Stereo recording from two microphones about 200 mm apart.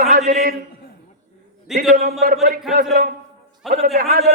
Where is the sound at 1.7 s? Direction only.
Centre (ahead or behind).